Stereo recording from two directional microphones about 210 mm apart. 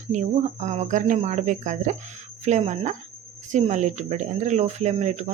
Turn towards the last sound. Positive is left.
turn(degrees=-35)  # may be behind; listen again after turning